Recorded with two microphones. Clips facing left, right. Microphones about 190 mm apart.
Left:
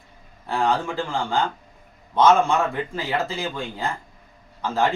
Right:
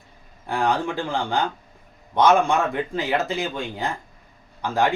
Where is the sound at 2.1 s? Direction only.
15° right (ahead or behind).